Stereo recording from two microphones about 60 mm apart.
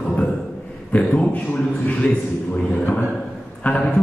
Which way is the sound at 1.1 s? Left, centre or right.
Left.